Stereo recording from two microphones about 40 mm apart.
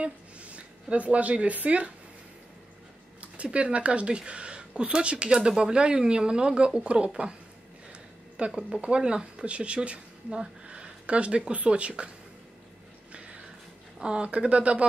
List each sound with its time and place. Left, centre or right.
0.0 s speech: right
3.2 s speech: right
8.5 s speech: right
10.7 s a sound: right
11.5 s speech: right
13.9 s speech: right